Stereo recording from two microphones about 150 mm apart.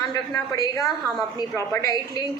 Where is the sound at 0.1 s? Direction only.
25° left (ahead or behind).